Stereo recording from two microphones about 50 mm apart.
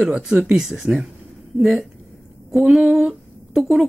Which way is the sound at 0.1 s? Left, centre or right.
Right.